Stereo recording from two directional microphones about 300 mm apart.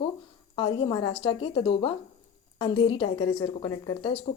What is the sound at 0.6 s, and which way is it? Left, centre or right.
Speech, centre.